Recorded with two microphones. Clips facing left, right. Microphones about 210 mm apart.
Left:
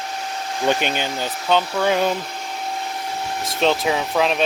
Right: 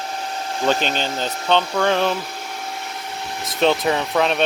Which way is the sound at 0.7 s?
15° left (ahead or behind).